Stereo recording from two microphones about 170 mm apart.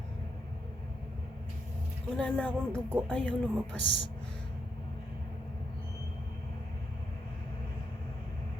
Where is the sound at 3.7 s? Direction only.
90° right.